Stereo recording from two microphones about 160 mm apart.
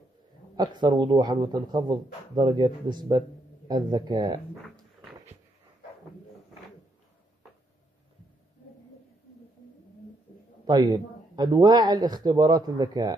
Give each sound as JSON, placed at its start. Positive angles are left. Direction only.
{"t": 0.6, "sound": "speech", "side_deg": -25}
{"t": 10.7, "sound": "speech", "side_deg": -25}